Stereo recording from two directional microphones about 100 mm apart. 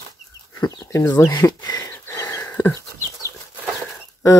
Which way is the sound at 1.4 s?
35° left (ahead or behind).